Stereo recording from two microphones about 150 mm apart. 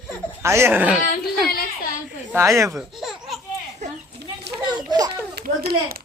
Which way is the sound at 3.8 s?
50° right (ahead or behind).